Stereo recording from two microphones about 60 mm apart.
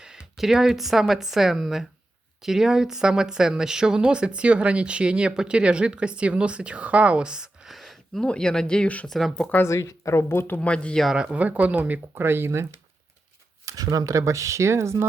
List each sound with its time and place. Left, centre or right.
0.0 s speech: centre
7.7 s a sound: centre
8.3 s speech: centre
9.0 s speech: centre
9.6 s a woman's voice: left
10.6 s speech: centre
11.1 s speech: centre
12.1 s speech: right
13.7 s speech: right